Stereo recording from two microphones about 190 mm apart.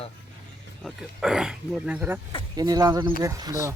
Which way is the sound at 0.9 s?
5° right (ahead or behind).